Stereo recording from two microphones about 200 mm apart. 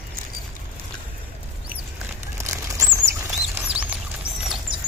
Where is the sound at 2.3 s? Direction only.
15° right (ahead or behind).